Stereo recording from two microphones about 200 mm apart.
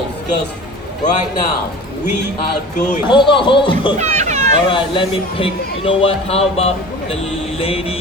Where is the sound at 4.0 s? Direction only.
35° right (ahead or behind).